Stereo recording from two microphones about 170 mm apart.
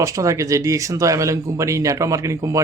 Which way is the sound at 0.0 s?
20° right (ahead or behind).